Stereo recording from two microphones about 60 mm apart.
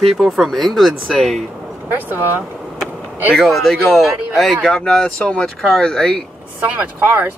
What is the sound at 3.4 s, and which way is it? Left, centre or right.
Speech, centre.